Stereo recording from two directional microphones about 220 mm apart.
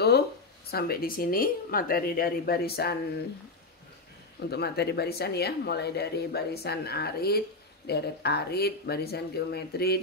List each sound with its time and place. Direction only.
0.7 s speech: 45° left (ahead or behind)
4.5 s speech: 45° left (ahead or behind)